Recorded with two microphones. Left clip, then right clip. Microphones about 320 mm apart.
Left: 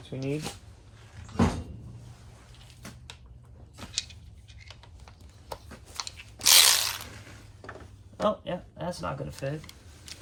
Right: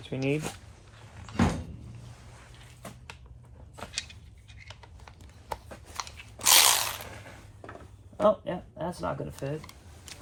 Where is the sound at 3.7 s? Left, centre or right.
Centre.